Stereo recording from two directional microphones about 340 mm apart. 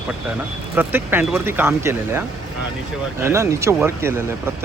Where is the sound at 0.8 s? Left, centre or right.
Centre.